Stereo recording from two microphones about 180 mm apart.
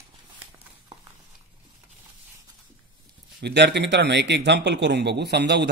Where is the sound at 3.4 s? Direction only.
70° right (ahead or behind).